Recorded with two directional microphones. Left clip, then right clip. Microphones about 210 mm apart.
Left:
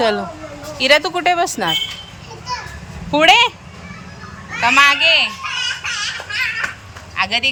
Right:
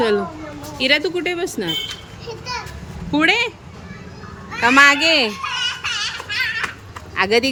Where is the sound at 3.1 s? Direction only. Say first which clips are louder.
Left 6 dB; 10° right (ahead or behind).